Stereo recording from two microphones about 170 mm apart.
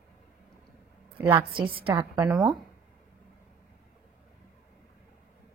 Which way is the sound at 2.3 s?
Centre (ahead or behind).